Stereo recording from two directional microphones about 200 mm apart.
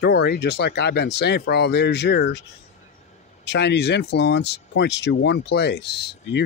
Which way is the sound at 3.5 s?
60° left (ahead or behind).